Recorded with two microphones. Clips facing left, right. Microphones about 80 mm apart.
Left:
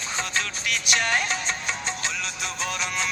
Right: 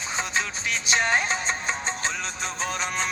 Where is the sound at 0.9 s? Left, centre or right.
Right.